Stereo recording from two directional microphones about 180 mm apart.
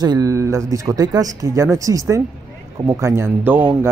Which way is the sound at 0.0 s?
20° right (ahead or behind).